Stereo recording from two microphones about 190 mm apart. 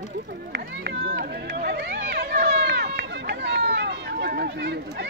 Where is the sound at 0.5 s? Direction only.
60° right (ahead or behind).